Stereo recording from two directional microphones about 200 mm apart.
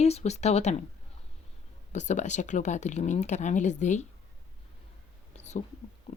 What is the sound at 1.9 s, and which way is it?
Speech, 35° left (ahead or behind).